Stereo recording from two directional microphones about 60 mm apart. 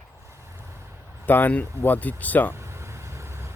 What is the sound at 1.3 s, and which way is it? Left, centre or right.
Speech, left.